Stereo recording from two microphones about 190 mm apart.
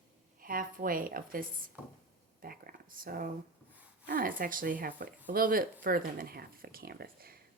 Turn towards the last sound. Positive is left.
turn(degrees=-50)  # may be behind; listen again after turning